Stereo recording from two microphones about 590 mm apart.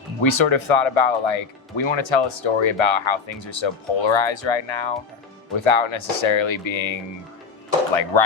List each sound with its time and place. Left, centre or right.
0.2 s speech: left